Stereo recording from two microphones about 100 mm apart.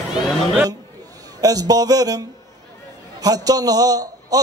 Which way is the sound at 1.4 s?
40° right (ahead or behind).